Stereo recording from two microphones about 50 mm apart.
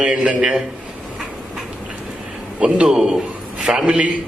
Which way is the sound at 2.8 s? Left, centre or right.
Centre.